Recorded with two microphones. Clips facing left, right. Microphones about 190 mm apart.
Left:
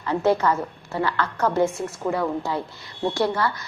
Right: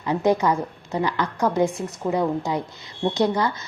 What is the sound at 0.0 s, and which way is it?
A woman's voice, 15° right (ahead or behind).